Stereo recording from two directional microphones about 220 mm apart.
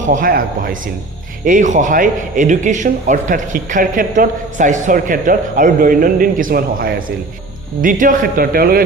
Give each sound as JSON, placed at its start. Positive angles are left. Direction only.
{"t": 0.0, "sound": "speech", "side_deg": -35}